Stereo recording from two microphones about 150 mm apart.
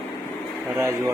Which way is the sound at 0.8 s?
20° right (ahead or behind).